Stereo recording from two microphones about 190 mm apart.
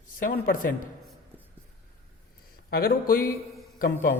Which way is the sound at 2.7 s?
55° left (ahead or behind).